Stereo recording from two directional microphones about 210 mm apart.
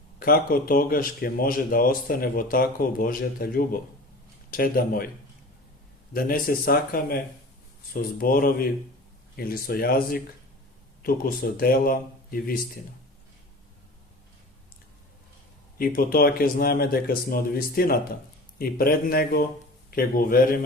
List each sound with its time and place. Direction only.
0.2 s speech: 45° left (ahead or behind)
6.1 s speech: 45° left (ahead or behind)
15.8 s speech: 45° left (ahead or behind)